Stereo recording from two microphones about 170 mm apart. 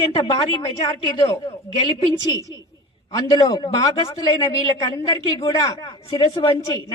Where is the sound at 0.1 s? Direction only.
30° left (ahead or behind).